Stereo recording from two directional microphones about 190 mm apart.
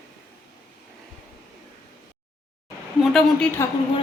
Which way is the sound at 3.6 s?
15° left (ahead or behind).